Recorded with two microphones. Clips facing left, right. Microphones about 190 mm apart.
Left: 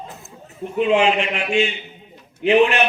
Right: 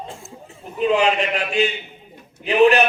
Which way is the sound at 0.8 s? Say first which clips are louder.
Left 1 dB; 40° right (ahead or behind).